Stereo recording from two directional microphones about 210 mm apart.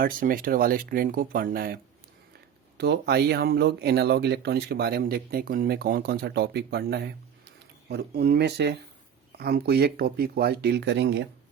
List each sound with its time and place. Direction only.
0.0 s speech: 40° right (ahead or behind)